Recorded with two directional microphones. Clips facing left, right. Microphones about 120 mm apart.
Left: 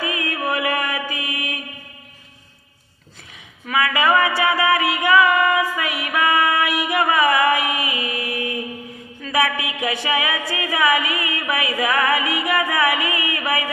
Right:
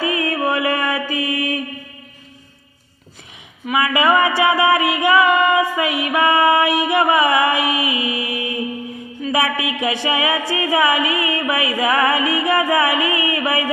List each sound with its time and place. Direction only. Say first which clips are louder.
0.0 s music: right 5 dB; 30° right (ahead or behind)
3.7 s music: right 2 dB; 20° right (ahead or behind)